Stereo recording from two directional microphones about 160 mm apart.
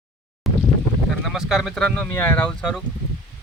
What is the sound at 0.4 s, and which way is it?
Boat, centre (ahead or behind).